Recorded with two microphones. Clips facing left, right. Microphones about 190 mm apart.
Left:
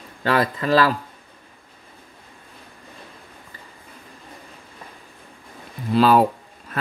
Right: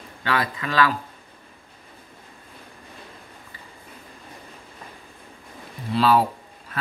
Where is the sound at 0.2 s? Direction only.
40° left (ahead or behind).